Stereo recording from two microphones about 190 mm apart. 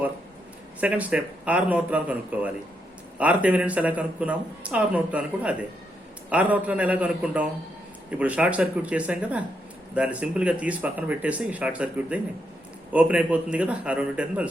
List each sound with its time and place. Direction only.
0.8 s speech: 5° right (ahead or behind)